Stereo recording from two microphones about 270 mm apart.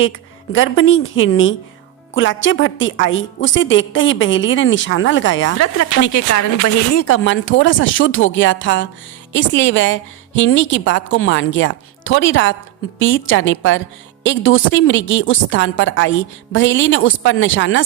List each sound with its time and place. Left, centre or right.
0.0 s a woman's voice: left
5.5 s a woman's voice: left